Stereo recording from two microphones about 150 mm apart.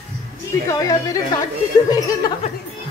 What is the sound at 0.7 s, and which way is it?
Speech, 20° left (ahead or behind).